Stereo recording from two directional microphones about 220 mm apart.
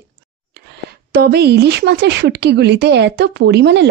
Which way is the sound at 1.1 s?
45° right (ahead or behind).